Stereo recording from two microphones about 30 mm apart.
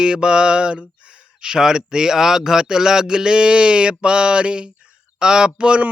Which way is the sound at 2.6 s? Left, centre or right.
Right.